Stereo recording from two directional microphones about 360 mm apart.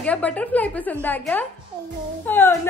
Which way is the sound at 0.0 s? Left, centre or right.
Centre.